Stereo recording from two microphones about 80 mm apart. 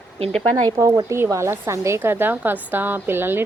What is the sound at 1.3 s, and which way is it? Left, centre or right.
A woman's voice, right.